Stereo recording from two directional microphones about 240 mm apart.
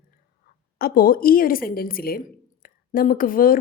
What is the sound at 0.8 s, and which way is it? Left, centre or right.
A woman's voice, left.